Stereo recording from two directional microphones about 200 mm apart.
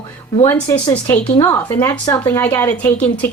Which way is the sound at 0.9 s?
10° left (ahead or behind).